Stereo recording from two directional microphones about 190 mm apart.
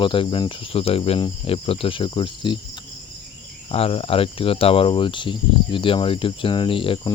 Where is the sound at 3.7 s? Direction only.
30° left (ahead or behind).